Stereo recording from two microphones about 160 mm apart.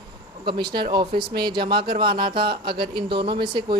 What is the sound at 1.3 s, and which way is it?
Speech, 75° right (ahead or behind).